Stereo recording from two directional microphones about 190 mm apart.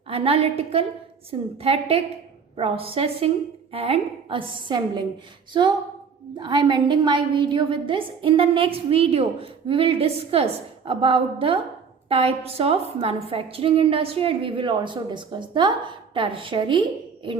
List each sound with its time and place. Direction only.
0.1 s a woman's voice: 30° right (ahead or behind)